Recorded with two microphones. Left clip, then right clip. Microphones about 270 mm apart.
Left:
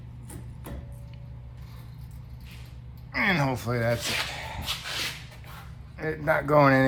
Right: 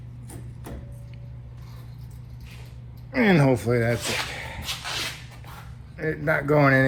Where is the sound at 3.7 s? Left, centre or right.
Left.